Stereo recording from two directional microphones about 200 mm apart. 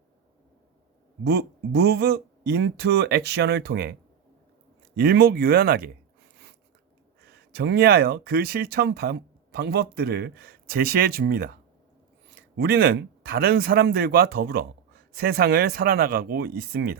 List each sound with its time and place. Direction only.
1.2 s speech: 55° right (ahead or behind)
4.9 s speech: 50° right (ahead or behind)
6.3 s a sound: 60° right (ahead or behind)
7.3 s speech: 55° right (ahead or behind)